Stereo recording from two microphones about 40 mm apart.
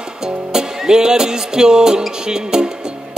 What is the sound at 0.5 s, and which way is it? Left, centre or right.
Music, centre.